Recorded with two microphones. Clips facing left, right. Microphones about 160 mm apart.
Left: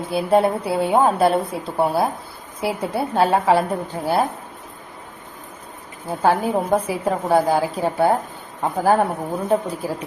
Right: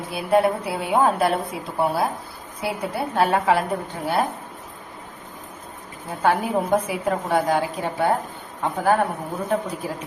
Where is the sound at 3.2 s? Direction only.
30° left (ahead or behind).